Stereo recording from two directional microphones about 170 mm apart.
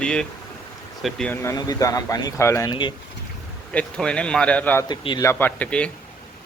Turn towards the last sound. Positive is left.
turn(degrees=10)  # may be behind; listen again after turning